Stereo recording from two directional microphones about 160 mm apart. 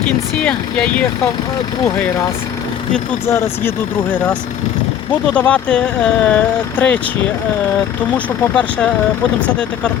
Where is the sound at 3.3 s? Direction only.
15° left (ahead or behind).